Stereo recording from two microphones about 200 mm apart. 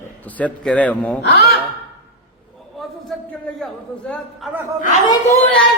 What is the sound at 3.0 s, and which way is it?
A man's voice, centre (ahead or behind).